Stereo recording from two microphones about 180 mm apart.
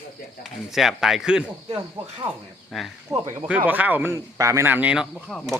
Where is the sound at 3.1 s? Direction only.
15° right (ahead or behind); by 5.5 s centre (ahead or behind).